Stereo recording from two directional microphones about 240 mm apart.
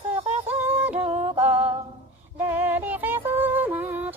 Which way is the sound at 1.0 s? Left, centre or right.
Right.